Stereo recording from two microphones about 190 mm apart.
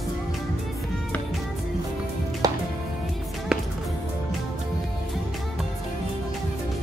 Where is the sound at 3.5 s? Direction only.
5° right (ahead or behind).